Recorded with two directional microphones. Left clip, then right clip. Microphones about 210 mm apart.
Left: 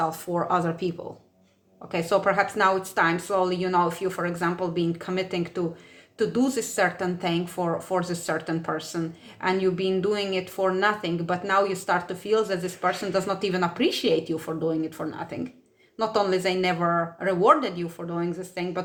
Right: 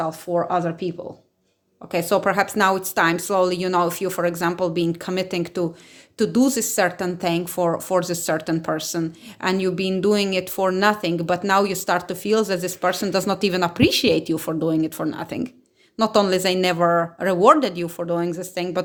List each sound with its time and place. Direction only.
0.0 s speech: 20° right (ahead or behind)
1.9 s a woman's voice: 35° right (ahead or behind)